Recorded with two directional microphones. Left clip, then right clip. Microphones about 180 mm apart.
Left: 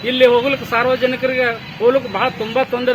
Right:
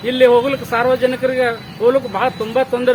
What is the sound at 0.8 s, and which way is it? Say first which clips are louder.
Speech: right 4 dB; 15° right (ahead or behind).